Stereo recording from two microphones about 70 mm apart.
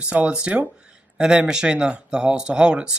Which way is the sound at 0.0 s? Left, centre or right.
Centre.